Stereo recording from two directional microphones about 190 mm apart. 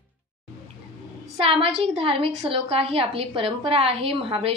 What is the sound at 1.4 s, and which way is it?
A woman's voice, 30° right (ahead or behind).